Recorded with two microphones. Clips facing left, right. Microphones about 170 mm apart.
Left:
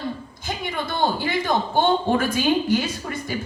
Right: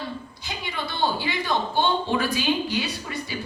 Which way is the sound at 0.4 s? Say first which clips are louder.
Left 5 dB; 50° left (ahead or behind).